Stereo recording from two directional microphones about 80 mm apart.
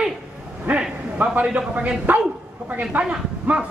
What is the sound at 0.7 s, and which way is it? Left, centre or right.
Speech, centre.